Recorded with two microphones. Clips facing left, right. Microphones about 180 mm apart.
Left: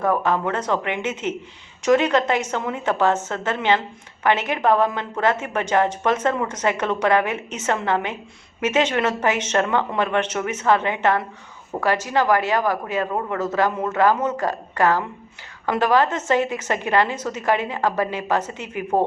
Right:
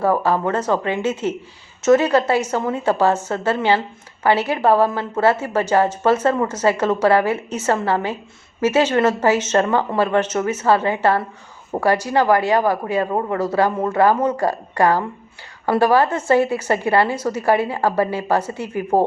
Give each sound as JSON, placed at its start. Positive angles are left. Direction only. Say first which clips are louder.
{"t": 0.5, "sound": "speech", "louder": "right 4 dB", "side_deg": -10}
{"t": 13.1, "sound": "speech", "louder": "right 4 dB", "side_deg": -25}
{"t": 13.3, "sound": "speech", "louder": "right 2 dB", "side_deg": -10}